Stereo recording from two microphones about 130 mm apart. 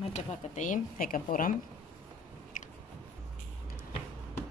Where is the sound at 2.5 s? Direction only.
75° left (ahead or behind).